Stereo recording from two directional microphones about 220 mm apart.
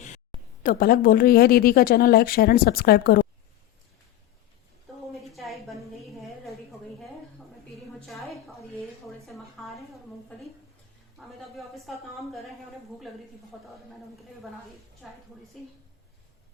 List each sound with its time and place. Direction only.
0.6 s speech: 40° left (ahead or behind)
5.1 s a sound: centre (ahead or behind)
8.0 s a sound: centre (ahead or behind)
11.3 s speech: centre (ahead or behind)
13.5 s a woman's voice: 5° right (ahead or behind)
15.0 s a woman's voice: centre (ahead or behind)